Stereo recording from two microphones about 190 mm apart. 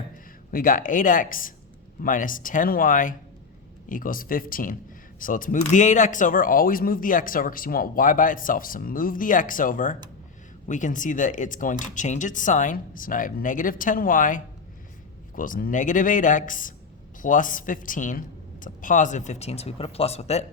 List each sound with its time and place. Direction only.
0.5 s speech: 45° left (ahead or behind)